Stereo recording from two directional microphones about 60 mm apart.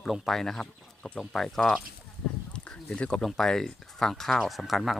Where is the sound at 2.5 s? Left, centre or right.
Centre.